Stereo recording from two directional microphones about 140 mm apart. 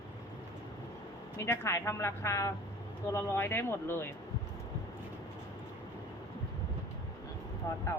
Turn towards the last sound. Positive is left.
turn(degrees=20)  # may be behind; listen again after turning